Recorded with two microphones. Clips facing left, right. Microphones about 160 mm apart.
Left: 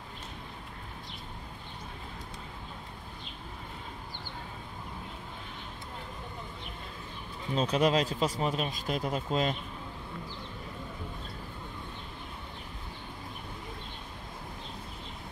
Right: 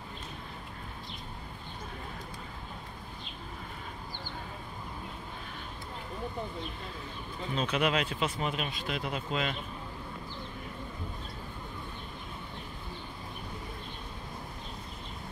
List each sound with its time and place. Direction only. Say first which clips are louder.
7.5 s speech: left 3 dB; 35° left (ahead or behind)